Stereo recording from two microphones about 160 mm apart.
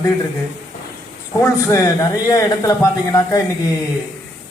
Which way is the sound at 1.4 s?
20° left (ahead or behind).